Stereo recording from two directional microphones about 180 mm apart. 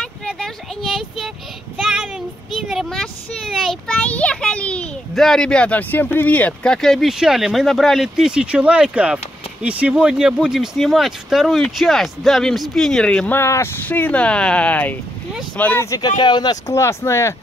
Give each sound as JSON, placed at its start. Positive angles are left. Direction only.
{"t": 0.0, "sound": "a sound", "side_deg": 5}
{"t": 1.8, "sound": "child singing", "side_deg": 0}
{"t": 2.5, "sound": "a child's voice", "side_deg": 0}